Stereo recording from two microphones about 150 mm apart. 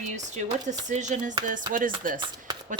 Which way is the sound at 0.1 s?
55° right (ahead or behind).